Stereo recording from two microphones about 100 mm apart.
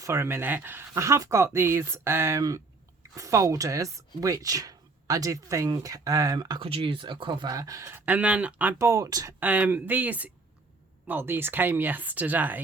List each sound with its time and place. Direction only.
0.0 s speech: 30° right (ahead or behind)
6.6 s speech: 70° right (ahead or behind); by 7.5 s 50° right (ahead or behind)
7.5 s speech: 35° right (ahead or behind)
8.0 s speech: 15° right (ahead or behind)
8.8 s speech: 35° right (ahead or behind)
9.4 s speech: 15° right (ahead or behind)